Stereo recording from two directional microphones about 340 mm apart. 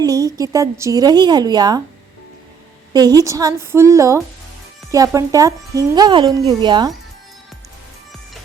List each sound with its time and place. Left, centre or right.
0.0 s a woman's voice: centre
2.9 s a woman's voice: centre